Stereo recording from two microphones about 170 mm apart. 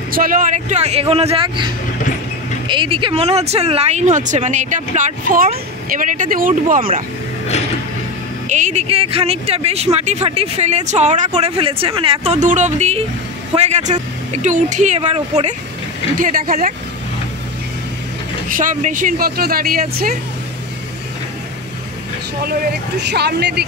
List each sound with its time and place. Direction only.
0.1 s speech: 55° right (ahead or behind); by 1.7 s 30° right (ahead or behind)
2.7 s speech: 30° right (ahead or behind); by 6.9 s 55° right (ahead or behind)
8.5 s speech: 45° right (ahead or behind)
16.2 s speech: 55° right (ahead or behind)
18.5 s speech: 50° right (ahead or behind)
22.4 s speech: 75° right (ahead or behind)